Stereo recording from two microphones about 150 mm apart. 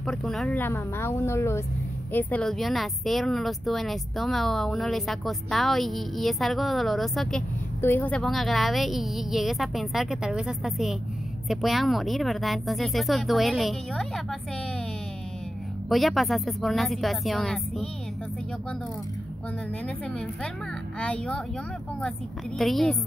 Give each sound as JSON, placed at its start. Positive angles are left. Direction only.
{"t": 0.0, "sound": "speech", "side_deg": 5}
{"t": 0.6, "sound": "a woman's voice", "side_deg": 15}
{"t": 2.1, "sound": "speech", "side_deg": 5}
{"t": 15.9, "sound": "speech", "side_deg": 0}
{"t": 21.0, "sound": "a woman's voice", "side_deg": 10}
{"t": 22.6, "sound": "speech", "side_deg": 0}